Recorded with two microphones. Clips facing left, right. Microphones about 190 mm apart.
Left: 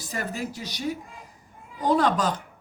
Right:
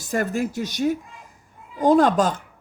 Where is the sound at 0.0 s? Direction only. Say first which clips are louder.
Right 8 dB; 50° right (ahead or behind).